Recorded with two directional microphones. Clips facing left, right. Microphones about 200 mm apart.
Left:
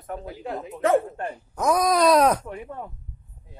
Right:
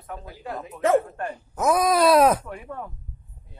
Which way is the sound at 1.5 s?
5° right (ahead or behind).